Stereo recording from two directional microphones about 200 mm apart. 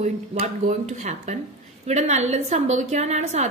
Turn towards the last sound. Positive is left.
turn(degrees=-35)  # may be behind; listen again after turning